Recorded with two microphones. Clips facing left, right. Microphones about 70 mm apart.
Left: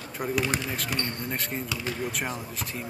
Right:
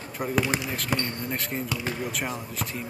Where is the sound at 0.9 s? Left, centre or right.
Right.